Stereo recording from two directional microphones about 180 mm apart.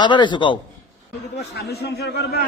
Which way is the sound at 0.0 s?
25° left (ahead or behind).